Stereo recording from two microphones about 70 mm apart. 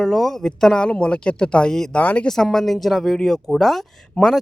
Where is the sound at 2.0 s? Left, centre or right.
Left.